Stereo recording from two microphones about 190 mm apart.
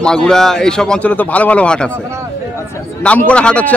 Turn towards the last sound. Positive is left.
turn(degrees=5)  # may be behind; listen again after turning